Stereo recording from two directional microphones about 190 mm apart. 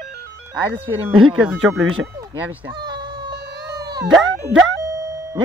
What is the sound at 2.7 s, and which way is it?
Chicken, 25° right (ahead or behind).